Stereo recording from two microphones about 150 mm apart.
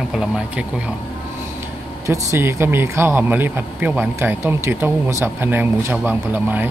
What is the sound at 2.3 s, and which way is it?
A man's voice, 15° right (ahead or behind).